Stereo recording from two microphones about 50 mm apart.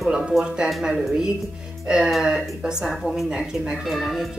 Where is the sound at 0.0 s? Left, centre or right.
Centre.